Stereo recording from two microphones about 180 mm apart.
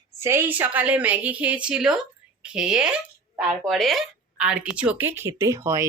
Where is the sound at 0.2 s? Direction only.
15° right (ahead or behind).